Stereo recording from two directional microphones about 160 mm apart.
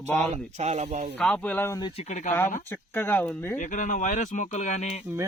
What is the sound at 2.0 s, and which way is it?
Speech, 50° left (ahead or behind).